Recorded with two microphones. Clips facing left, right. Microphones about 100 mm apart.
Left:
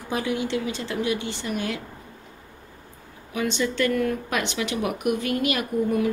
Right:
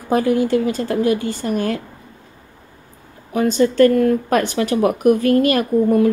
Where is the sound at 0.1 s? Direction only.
45° right (ahead or behind).